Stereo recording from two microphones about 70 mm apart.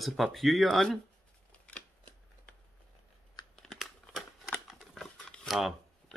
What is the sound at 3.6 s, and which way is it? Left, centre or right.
Crumpling, centre.